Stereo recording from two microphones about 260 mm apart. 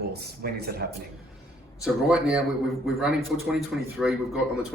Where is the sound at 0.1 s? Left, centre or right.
Right.